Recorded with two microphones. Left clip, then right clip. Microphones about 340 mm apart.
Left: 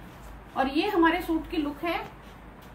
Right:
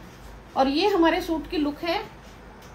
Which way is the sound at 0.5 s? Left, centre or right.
Centre.